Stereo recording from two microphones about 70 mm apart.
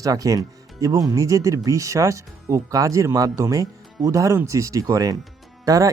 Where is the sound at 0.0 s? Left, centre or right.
Right.